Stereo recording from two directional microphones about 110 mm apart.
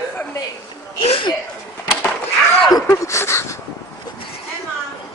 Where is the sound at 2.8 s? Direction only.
30° left (ahead or behind).